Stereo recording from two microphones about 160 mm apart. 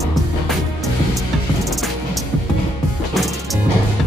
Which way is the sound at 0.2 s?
Centre (ahead or behind).